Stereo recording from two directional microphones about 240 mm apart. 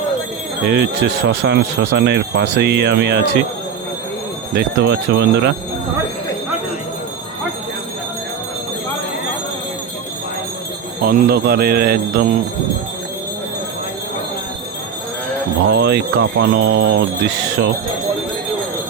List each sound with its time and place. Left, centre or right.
0.7 s speech: right
4.5 s speech: right
11.0 s jingle bell: right
15.7 s speech: right